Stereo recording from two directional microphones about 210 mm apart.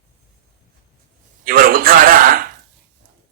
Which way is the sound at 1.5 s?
45° right (ahead or behind).